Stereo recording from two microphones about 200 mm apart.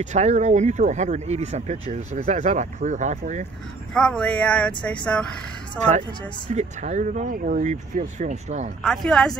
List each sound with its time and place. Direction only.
0.0 s speech: 35° right (ahead or behind)
3.9 s speech: 5° left (ahead or behind)
5.8 s speech: 35° right (ahead or behind)
8.8 s speech: 5° left (ahead or behind)